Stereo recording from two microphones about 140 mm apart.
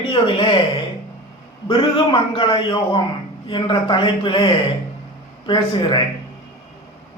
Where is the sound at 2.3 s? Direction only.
35° left (ahead or behind).